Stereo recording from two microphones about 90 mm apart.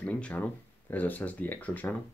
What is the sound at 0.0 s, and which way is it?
Speech, 15° left (ahead or behind).